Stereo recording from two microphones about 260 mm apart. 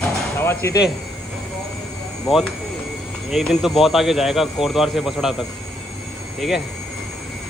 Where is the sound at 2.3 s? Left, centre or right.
Centre.